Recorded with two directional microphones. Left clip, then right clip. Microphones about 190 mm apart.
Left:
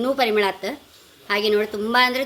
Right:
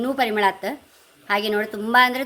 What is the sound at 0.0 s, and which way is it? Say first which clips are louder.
A woman's voice: left 1 dB; 25° right (ahead or behind).